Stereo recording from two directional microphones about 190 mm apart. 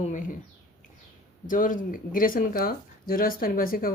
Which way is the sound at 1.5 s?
45° left (ahead or behind).